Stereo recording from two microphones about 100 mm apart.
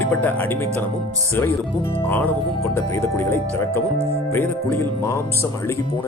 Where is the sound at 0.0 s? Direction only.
15° left (ahead or behind).